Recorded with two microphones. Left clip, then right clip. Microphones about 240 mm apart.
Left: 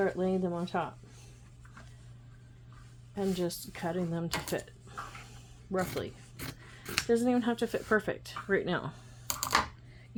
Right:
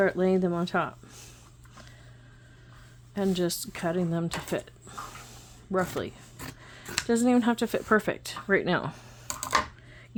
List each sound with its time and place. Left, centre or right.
0.0 s speech: right
3.2 s speech: right
7.1 s speech: right